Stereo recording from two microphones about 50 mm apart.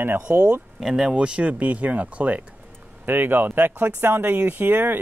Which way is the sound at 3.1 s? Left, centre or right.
Right.